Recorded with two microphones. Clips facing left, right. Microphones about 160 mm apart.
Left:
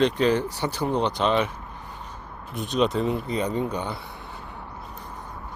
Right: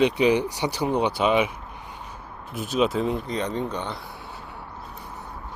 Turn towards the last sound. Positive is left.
turn(degrees=10)  # may be behind; listen again after turning